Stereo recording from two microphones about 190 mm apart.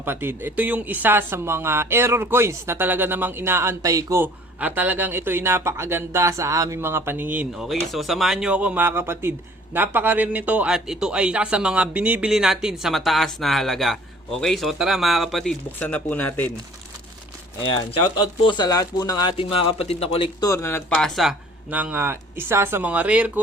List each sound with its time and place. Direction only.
0.0 s speech: 10° right (ahead or behind); by 16.5 s 10° left (ahead or behind)
18.4 s speech: 20° left (ahead or behind)
20.4 s speech: 15° left (ahead or behind)
21.2 s speech: 5° right (ahead or behind)